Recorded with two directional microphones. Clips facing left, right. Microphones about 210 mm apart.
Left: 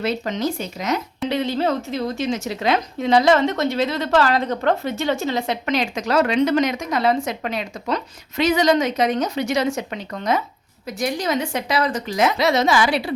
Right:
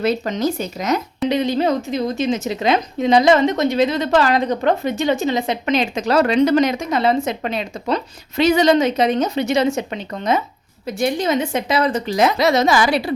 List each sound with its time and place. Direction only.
0.0 s speech: 40° right (ahead or behind)
1.3 s a woman's voice: 15° right (ahead or behind); by 13.0 s 40° right (ahead or behind)